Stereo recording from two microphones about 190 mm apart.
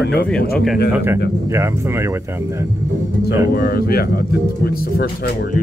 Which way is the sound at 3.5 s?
50° left (ahead or behind).